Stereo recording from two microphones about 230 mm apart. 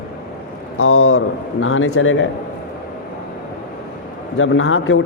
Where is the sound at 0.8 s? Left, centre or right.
Left.